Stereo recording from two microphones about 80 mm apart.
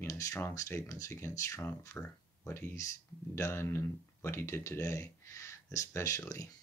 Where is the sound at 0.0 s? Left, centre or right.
Left.